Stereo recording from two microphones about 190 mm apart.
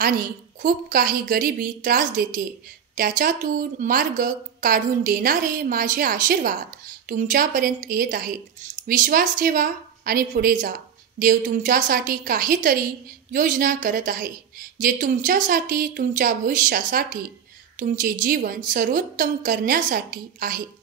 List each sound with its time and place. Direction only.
0.0 s a woman's voice: 50° right (ahead or behind)